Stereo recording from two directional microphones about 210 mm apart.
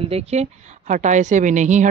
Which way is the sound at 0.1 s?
30° right (ahead or behind).